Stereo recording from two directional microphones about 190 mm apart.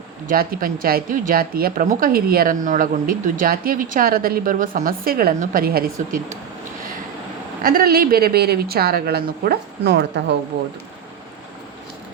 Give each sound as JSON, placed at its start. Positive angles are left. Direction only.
{"t": 0.3, "sound": "a woman's voice", "side_deg": -50}
{"t": 7.6, "sound": "a woman's voice", "side_deg": -50}